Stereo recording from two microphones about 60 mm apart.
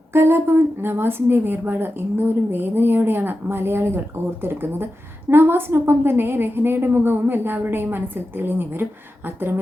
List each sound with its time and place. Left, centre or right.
0.1 s a woman's voice: right